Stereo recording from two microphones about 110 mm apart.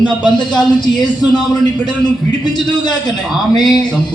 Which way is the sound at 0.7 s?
40° left (ahead or behind).